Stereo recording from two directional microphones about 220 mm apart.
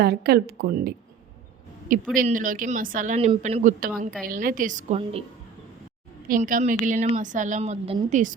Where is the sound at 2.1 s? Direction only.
40° right (ahead or behind).